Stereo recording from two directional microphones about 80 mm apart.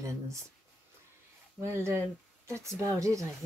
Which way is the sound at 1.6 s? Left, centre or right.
Right.